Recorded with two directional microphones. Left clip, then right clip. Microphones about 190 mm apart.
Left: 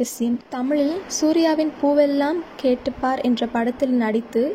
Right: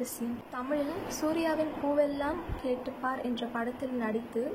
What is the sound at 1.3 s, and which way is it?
A woman's voice, 35° left (ahead or behind).